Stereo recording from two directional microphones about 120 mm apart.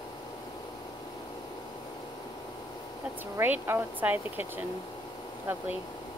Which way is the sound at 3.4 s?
15° right (ahead or behind).